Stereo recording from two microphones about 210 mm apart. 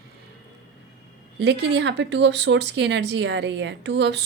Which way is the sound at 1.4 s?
55° right (ahead or behind).